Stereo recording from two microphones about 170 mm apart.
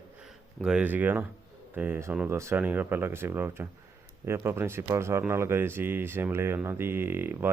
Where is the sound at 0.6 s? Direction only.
5° right (ahead or behind).